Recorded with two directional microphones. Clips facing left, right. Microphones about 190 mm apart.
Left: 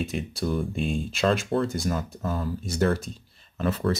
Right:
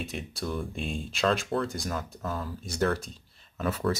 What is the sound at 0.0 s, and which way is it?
Speech, centre (ahead or behind).